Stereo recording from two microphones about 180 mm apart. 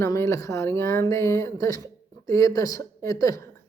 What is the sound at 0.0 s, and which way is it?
A woman's voice, 15° left (ahead or behind).